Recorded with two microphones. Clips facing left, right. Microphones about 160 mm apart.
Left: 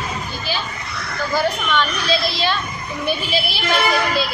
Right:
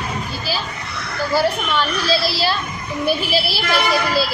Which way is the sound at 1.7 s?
35° right (ahead or behind).